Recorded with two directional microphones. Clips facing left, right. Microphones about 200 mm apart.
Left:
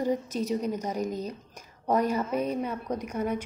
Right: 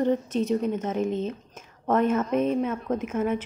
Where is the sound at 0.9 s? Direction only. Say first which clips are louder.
Right 5 dB; 40° left (ahead or behind).